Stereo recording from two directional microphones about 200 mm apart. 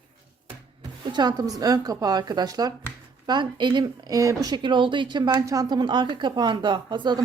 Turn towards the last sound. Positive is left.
turn(degrees=-20)  # may be behind; listen again after turning